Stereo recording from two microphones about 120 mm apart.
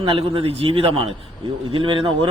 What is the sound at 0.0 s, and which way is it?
A man's voice, 50° right (ahead or behind).